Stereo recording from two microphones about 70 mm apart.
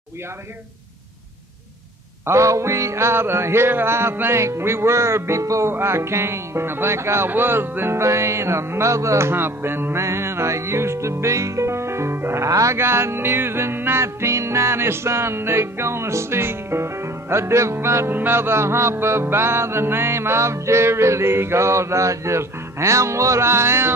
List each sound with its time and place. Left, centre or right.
2.2 s music: right
9.3 s music: right
12.4 s music: right